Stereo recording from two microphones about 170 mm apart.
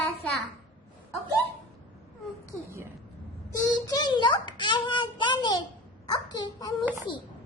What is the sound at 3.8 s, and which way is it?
A child's voice, 25° left (ahead or behind).